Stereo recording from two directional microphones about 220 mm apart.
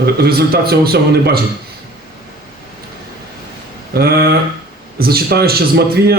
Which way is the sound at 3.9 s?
45° right (ahead or behind).